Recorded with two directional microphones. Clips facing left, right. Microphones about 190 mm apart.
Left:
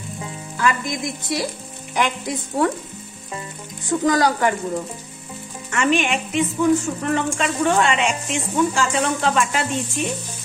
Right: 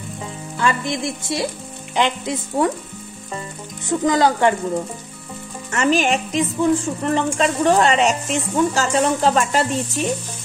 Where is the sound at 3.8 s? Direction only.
20° right (ahead or behind).